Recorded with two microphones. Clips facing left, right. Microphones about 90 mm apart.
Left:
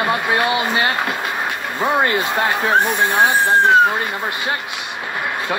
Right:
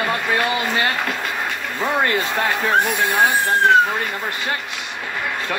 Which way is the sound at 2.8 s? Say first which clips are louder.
Left 2 dB; centre (ahead or behind).